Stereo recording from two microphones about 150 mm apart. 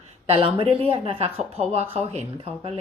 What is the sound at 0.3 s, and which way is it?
A woman's voice, 35° right (ahead or behind).